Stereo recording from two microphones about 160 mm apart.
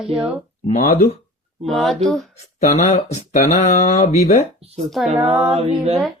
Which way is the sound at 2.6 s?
50° left (ahead or behind).